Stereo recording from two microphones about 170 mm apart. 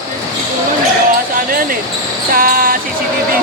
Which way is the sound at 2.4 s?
55° right (ahead or behind).